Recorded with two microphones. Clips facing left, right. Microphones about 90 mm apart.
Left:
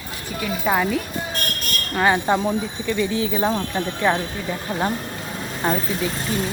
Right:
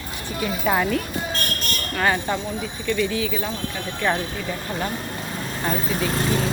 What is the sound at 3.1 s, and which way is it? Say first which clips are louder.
Speech: left 4 dB; 30° left (ahead or behind).